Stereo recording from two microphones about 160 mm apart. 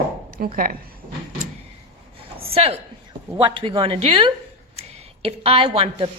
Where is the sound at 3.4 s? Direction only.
30° right (ahead or behind).